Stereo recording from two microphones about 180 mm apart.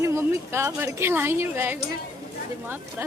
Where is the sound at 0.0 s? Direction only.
15° right (ahead or behind).